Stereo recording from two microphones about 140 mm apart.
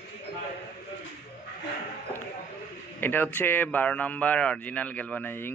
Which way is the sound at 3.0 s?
15° left (ahead or behind).